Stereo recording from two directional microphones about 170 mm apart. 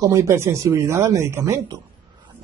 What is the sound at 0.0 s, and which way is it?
A man's voice, 20° right (ahead or behind).